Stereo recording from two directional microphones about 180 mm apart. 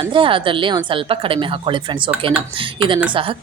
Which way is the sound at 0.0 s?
30° right (ahead or behind).